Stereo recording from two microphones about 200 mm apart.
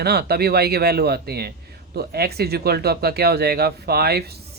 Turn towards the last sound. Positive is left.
turn(degrees=-50)  # may be behind; listen again after turning